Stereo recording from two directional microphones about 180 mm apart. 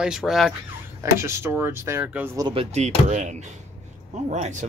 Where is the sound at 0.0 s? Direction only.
Centre (ahead or behind).